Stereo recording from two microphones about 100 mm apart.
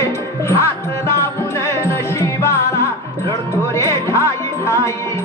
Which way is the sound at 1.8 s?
30° left (ahead or behind).